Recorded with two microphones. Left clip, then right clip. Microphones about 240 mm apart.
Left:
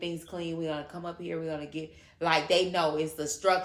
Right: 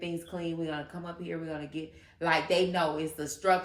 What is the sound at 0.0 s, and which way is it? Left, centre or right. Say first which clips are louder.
A woman's voice: even; centre.